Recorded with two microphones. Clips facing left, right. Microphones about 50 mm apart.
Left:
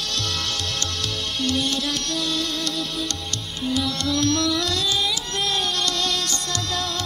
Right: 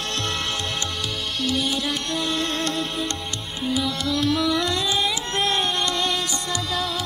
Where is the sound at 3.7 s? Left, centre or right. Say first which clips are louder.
Even; centre.